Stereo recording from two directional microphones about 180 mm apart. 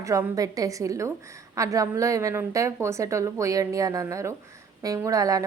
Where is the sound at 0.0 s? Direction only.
15° right (ahead or behind).